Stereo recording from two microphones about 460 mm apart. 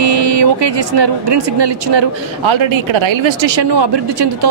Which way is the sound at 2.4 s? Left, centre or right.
Right.